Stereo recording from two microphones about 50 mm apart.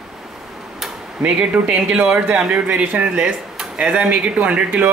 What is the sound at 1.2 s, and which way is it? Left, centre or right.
Speech, right.